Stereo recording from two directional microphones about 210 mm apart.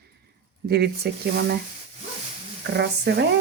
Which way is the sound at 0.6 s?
50° right (ahead or behind).